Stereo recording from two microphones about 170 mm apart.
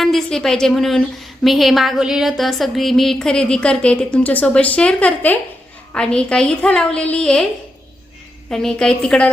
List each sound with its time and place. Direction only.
0.0 s a woman's voice: centre (ahead or behind)
8.4 s a woman's voice: 5° left (ahead or behind)